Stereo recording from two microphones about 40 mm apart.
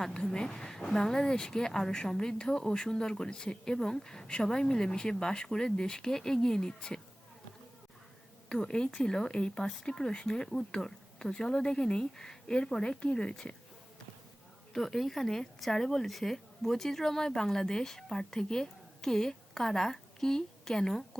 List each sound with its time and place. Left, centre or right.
0.3 s speech: centre
8.6 s speech: centre
14.7 s speech: centre